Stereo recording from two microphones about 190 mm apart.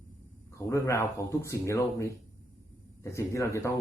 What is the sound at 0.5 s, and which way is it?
A man's voice, 15° left (ahead or behind).